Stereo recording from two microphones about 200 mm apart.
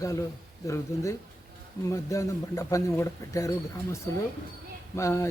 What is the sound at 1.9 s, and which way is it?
A man's voice, 15° left (ahead or behind).